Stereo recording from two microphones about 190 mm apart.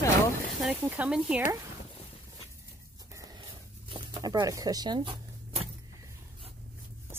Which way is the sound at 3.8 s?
25° right (ahead or behind).